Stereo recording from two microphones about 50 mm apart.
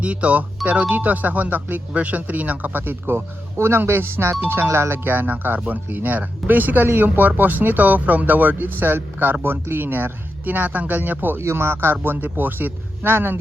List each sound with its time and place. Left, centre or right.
0.0 s speech: right
11.3 s speech: right